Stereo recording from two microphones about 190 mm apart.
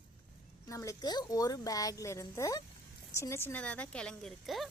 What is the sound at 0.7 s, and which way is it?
A woman's voice, 15° left (ahead or behind).